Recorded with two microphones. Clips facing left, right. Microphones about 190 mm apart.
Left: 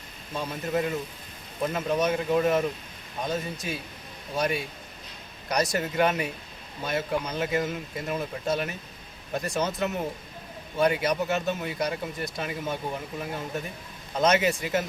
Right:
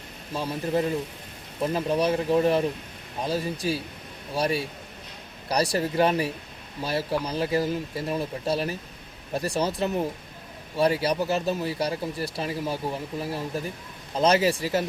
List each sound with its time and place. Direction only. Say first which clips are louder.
0.3 s speech: right 2 dB; 30° right (ahead or behind)